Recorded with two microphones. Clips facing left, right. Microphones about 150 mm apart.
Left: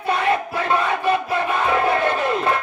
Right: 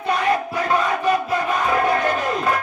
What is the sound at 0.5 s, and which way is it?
Crowd, 25° left (ahead or behind).